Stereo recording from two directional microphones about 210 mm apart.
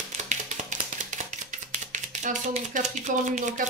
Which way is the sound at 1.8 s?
35° right (ahead or behind).